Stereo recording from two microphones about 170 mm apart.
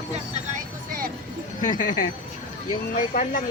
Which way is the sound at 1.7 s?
50° left (ahead or behind).